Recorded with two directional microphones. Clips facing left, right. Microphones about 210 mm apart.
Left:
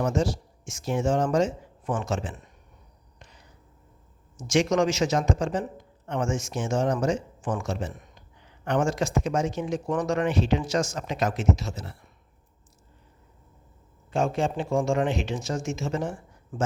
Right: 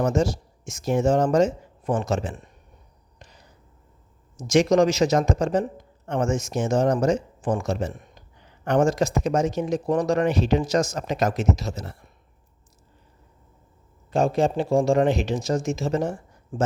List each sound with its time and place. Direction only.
0.0 s speech: 45° right (ahead or behind)
3.2 s a sound: 35° right (ahead or behind)
4.4 s a man's voice: 40° right (ahead or behind)
14.1 s a man's voice: 35° right (ahead or behind)